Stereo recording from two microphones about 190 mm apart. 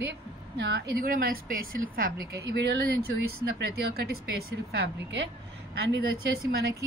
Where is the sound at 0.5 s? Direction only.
65° right (ahead or behind).